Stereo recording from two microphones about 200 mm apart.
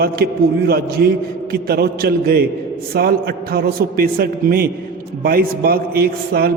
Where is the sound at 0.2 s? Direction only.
55° right (ahead or behind).